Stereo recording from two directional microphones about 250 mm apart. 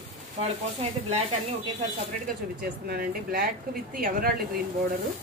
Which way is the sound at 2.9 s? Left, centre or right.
Right.